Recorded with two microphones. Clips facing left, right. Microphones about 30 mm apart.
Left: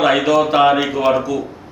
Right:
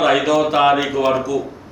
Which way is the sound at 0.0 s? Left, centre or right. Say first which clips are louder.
Left 1 dB; centre.